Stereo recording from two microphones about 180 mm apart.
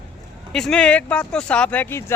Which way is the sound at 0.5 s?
5° left (ahead or behind).